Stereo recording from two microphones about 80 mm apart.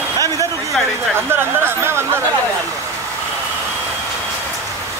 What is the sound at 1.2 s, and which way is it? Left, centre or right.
Speech, right.